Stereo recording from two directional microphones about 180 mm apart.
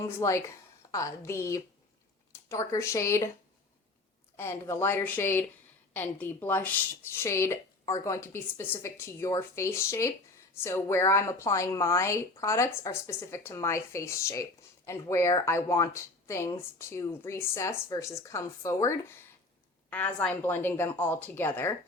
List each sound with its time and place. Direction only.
0.0 s a woman's voice: 15° left (ahead or behind)
4.4 s a woman's voice: 15° left (ahead or behind)